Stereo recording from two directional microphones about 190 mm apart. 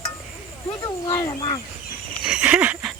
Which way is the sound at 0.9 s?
20° left (ahead or behind).